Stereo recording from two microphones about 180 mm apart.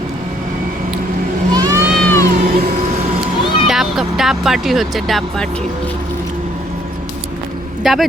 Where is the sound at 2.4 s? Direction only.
50° right (ahead or behind).